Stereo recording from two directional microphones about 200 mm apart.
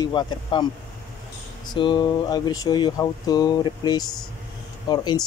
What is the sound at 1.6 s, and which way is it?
Speech, 25° left (ahead or behind).